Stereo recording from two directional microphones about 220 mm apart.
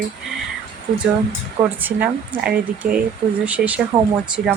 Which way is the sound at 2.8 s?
40° right (ahead or behind).